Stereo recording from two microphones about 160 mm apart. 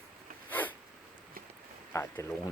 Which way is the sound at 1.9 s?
20° left (ahead or behind).